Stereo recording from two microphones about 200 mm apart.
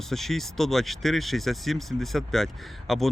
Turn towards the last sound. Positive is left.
turn(degrees=0)  # may be behind; listen again after turning